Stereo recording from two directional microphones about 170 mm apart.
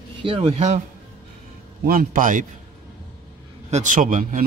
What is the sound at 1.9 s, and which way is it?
Speech, 55° right (ahead or behind).